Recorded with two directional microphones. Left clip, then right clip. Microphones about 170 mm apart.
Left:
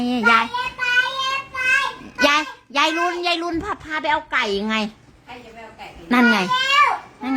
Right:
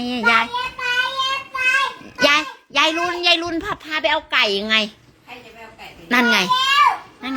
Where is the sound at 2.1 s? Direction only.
20° left (ahead or behind).